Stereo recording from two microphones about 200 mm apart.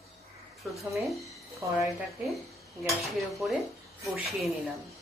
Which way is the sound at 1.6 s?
15° right (ahead or behind).